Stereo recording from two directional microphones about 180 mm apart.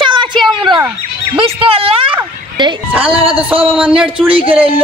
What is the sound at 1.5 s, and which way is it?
A man's voice, 30° right (ahead or behind).